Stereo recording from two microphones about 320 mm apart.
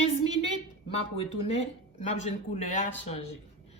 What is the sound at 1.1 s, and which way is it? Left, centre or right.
Speech, centre.